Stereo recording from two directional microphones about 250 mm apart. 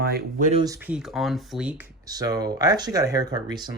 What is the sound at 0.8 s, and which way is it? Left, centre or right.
Speech, centre.